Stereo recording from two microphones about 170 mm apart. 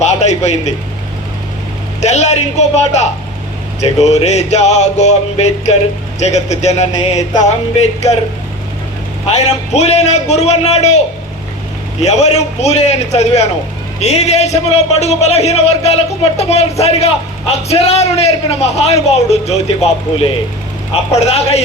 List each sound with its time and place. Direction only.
0.0 s a sound: 40° left (ahead or behind)
2.0 s a man's voice: 40° left (ahead or behind)
9.2 s a man's voice: 40° left (ahead or behind)